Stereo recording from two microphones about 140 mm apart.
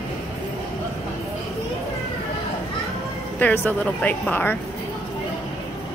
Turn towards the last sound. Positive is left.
turn(degrees=10)  # may be behind; listen again after turning